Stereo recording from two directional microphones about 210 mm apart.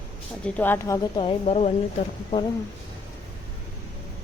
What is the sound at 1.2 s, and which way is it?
Speech, 30° left (ahead or behind).